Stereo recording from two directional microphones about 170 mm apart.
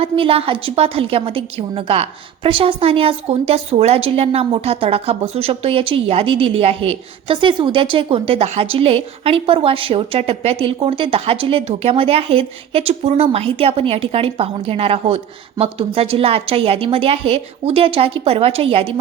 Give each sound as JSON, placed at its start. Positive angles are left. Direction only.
{"t": 0.0, "sound": "a woman's voice", "side_deg": -35}